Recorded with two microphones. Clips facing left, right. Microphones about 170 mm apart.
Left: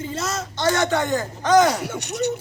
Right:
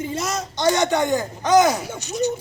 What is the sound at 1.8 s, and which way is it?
Speech, 70° left (ahead or behind).